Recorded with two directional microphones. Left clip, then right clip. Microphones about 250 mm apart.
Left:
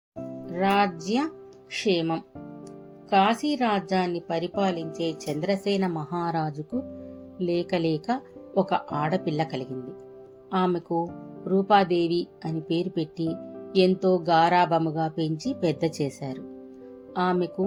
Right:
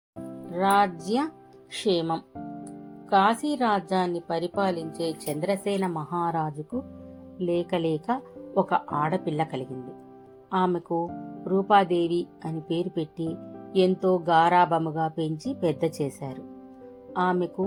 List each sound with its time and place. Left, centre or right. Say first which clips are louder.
0.5 s speech: right 1 dB; right